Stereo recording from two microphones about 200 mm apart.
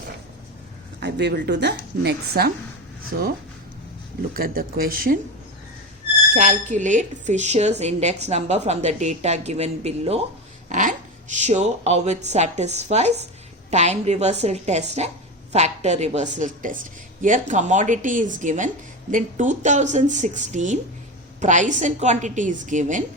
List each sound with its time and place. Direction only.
0.9 s a woman's voice: 55° right (ahead or behind)
4.4 s speech: 45° right (ahead or behind)
6.3 s speech: 35° right (ahead or behind)